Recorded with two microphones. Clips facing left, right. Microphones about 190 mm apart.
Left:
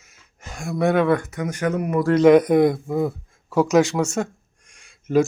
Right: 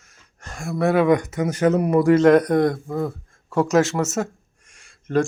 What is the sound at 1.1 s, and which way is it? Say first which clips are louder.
Speech: right 2 dB; 15° right (ahead or behind).